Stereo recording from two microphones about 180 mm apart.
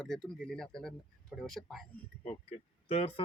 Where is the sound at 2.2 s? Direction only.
35° left (ahead or behind).